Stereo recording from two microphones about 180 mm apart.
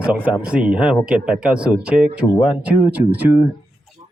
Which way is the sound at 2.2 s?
15° left (ahead or behind).